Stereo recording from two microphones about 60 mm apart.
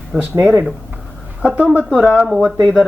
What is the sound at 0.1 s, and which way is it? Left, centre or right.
Speech, centre.